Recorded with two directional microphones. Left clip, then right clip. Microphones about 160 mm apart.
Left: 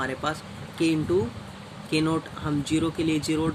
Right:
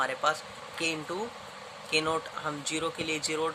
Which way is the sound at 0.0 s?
10° right (ahead or behind).